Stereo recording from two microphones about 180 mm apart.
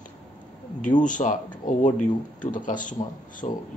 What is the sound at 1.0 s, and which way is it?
Speech, 45° left (ahead or behind).